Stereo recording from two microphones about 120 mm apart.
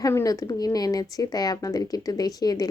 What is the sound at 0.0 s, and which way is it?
A woman's voice, 25° left (ahead or behind).